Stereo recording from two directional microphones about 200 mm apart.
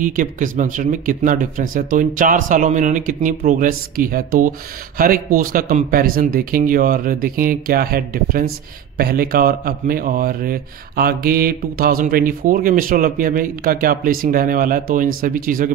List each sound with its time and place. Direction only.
0.0 s speech: 40° right (ahead or behind)